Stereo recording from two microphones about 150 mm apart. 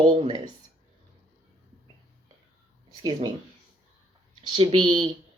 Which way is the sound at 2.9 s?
30° right (ahead or behind).